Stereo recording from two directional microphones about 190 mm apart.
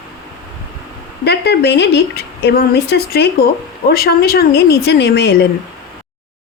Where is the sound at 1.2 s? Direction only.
60° left (ahead or behind).